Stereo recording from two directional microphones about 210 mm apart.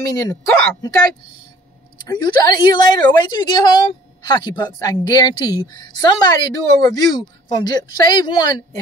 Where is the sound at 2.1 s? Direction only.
20° left (ahead or behind).